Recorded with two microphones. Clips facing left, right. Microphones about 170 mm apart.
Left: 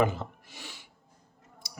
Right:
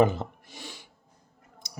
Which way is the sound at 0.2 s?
20° right (ahead or behind).